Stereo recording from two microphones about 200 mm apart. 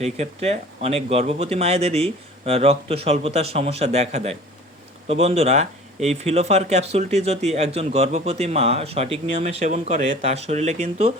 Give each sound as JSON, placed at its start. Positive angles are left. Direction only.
{"t": 0.0, "sound": "speech", "side_deg": -35}